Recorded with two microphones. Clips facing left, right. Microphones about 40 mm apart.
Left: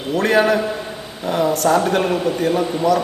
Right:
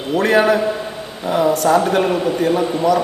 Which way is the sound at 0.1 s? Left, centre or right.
Centre.